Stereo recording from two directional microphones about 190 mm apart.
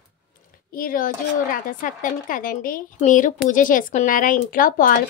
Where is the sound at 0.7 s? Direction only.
50° left (ahead or behind).